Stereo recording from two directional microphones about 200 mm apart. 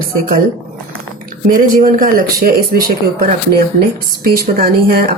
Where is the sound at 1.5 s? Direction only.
45° right (ahead or behind).